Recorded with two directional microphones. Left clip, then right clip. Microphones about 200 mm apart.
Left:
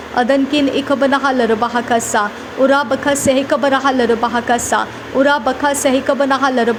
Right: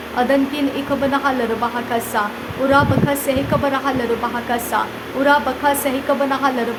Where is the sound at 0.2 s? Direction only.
25° left (ahead or behind).